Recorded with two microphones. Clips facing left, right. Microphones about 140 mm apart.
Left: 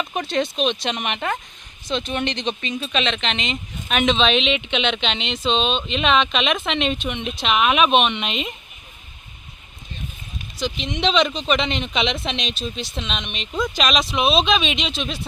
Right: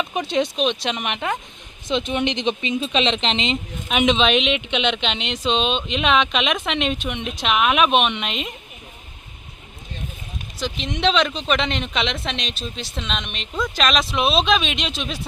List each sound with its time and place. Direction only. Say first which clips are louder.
0.0 s speech: right 1 dB; 10° right (ahead or behind)
1.9 s speech: right 2 dB; 15° right (ahead or behind)
3.8 s speech: right 1 dB; 15° right (ahead or behind)
10.6 s speech: even; centre (ahead or behind)